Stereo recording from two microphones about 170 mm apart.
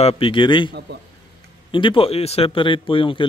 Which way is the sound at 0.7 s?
75° right (ahead or behind).